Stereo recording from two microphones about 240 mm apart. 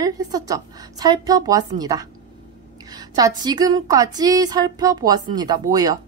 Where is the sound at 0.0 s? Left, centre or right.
Centre.